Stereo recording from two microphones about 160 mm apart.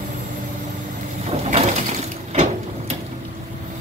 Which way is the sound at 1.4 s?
45° right (ahead or behind).